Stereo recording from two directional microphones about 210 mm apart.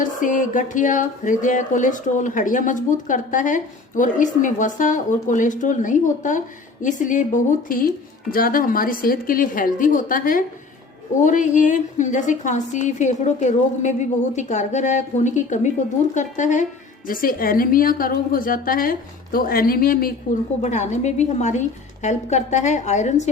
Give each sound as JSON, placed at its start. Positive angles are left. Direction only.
{"t": 0.0, "sound": "a woman's voice", "side_deg": 40}
{"t": 20.6, "sound": "speech", "side_deg": 35}